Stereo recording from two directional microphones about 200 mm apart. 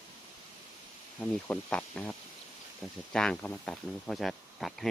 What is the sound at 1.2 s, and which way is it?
Speech, 5° left (ahead or behind).